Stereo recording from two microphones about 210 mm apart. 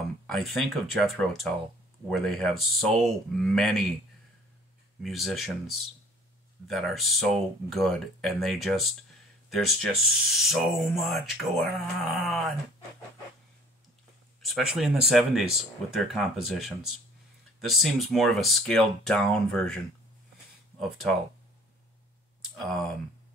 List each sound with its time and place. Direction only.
0.3 s speech: centre (ahead or behind)
5.0 s speech: centre (ahead or behind)
14.4 s speech: centre (ahead or behind)
22.4 s speech: centre (ahead or behind)